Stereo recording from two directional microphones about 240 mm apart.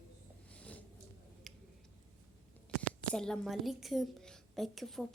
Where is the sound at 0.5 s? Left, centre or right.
Centre.